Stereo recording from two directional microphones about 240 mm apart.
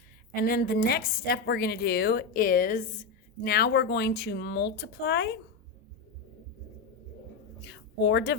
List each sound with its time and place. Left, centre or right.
0.4 s a woman's voice: left
7.6 s a woman's voice: left